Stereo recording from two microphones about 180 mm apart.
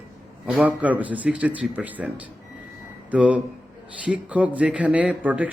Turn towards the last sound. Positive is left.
turn(degrees=-5)  # may be behind; listen again after turning